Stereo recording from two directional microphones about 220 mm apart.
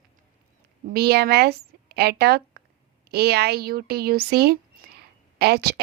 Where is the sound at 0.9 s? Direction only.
45° right (ahead or behind).